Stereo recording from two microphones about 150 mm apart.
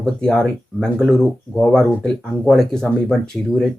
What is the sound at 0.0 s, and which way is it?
Speech, 5° left (ahead or behind).